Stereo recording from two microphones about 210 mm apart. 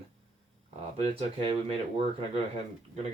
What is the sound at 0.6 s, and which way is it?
Speech, 30° right (ahead or behind).